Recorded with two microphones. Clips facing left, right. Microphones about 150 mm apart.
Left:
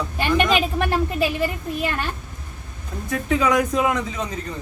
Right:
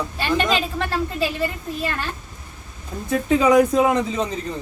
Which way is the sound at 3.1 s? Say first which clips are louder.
Right 4 dB; 25° right (ahead or behind).